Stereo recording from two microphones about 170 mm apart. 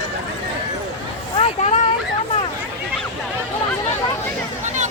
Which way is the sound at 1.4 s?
40° left (ahead or behind).